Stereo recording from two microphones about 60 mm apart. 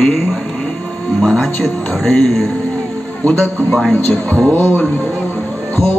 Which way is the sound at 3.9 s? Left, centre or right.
Left.